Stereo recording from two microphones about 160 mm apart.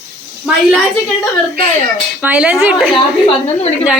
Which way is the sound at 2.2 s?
10° right (ahead or behind).